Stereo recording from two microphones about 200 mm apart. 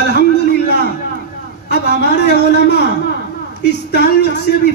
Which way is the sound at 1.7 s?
55° left (ahead or behind).